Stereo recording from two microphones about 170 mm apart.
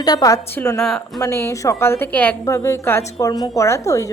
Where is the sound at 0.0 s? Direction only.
20° left (ahead or behind).